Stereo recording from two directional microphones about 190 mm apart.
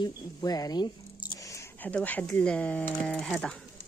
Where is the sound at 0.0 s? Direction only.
20° left (ahead or behind).